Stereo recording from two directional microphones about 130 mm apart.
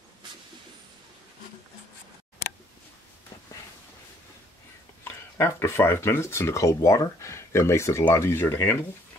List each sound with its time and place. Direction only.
5.0 s speech: 20° left (ahead or behind)